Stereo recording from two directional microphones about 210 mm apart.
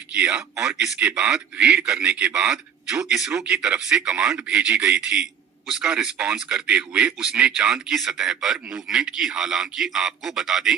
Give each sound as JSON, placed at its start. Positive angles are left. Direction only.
{"t": 0.1, "sound": "a man's voice", "side_deg": -5}